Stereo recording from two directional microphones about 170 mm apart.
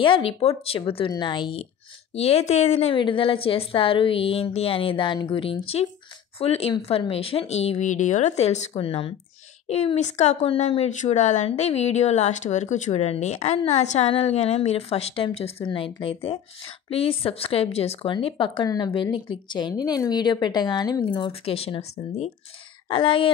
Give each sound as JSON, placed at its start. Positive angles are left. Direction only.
{"t": 0.0, "sound": "speech", "side_deg": 30}